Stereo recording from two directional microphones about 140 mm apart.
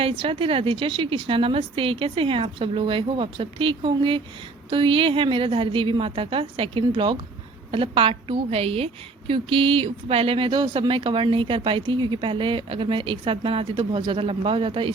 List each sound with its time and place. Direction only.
0.0 s a woman's voice: 40° right (ahead or behind)